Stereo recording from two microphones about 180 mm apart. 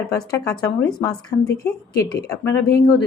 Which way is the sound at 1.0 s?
20° left (ahead or behind).